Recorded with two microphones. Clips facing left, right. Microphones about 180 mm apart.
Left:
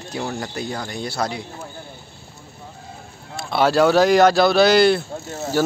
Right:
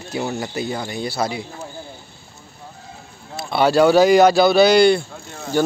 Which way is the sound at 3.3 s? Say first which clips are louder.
Right 1 dB; centre (ahead or behind).